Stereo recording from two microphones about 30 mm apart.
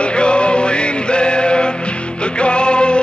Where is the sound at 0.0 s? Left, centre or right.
Left.